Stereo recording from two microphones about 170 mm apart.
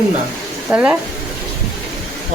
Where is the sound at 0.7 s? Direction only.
10° right (ahead or behind).